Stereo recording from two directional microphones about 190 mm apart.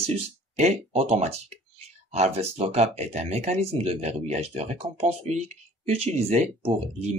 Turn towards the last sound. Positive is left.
turn(degrees=-35)  # may be behind; listen again after turning